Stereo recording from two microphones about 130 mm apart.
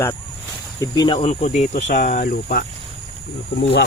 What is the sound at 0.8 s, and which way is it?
Speech, 35° left (ahead or behind).